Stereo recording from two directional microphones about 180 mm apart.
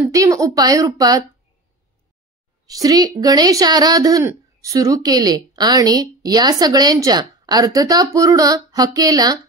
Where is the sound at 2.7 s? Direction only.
20° right (ahead or behind).